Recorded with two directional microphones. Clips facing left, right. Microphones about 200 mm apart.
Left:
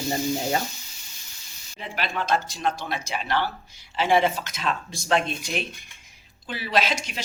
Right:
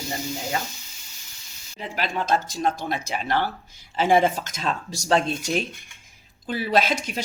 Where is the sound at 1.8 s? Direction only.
40° right (ahead or behind).